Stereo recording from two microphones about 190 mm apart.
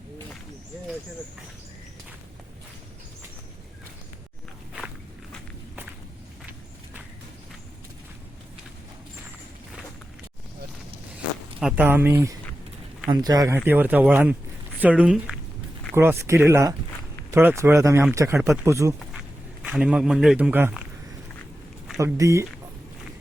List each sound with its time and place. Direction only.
11.6 s a man's voice: 10° right (ahead or behind)
21.9 s speech: 15° right (ahead or behind)